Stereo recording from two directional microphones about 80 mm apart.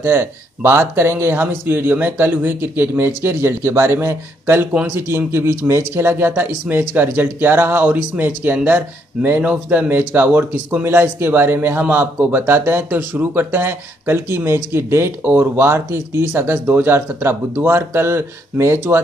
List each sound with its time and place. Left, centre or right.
0.0 s speech: right